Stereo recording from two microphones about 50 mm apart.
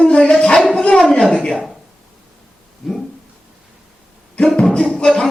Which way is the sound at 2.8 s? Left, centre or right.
Centre.